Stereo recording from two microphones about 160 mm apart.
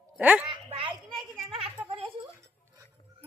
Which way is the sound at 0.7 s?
35° right (ahead or behind).